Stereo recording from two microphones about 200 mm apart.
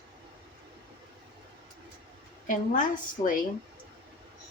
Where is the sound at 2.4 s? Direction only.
40° left (ahead or behind).